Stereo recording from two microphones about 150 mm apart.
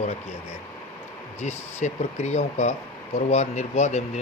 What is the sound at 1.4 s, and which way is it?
Speech, 50° left (ahead or behind).